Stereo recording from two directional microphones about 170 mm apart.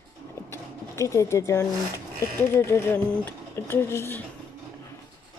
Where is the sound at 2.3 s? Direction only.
15° left (ahead or behind).